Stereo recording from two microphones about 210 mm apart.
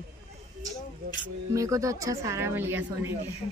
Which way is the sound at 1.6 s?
15° right (ahead or behind).